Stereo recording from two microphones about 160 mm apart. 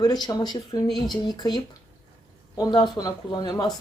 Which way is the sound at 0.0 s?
25° left (ahead or behind).